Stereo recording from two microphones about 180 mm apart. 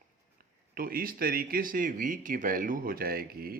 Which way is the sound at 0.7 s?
55° right (ahead or behind).